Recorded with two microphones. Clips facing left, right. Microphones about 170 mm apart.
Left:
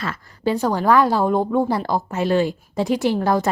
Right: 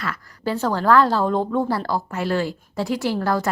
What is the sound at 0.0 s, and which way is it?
A woman's voice, 25° left (ahead or behind).